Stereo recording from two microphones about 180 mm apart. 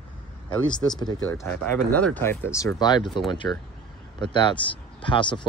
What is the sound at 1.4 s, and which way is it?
Speech, 10° left (ahead or behind).